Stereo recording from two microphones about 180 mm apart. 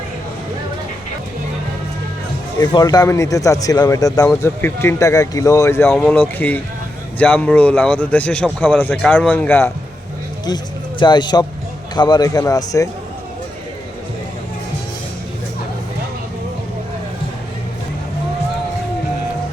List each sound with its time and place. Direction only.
2.6 s a man's voice: 20° left (ahead or behind)
11.0 s a man's voice: 25° left (ahead or behind)